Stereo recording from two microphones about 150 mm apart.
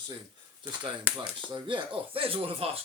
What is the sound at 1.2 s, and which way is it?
Speech, 30° right (ahead or behind).